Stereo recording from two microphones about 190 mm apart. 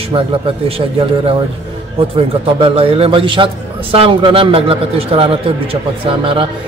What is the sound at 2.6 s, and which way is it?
A man's voice, 30° right (ahead or behind).